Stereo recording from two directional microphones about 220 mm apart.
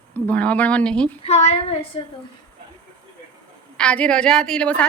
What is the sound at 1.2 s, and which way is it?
Speech, 30° left (ahead or behind).